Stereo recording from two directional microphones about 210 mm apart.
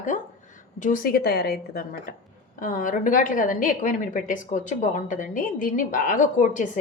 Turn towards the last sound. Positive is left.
turn(degrees=35)  # may be behind; listen again after turning